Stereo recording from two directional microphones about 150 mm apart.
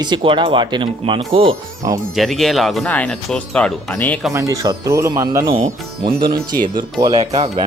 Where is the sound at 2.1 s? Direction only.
Centre (ahead or behind).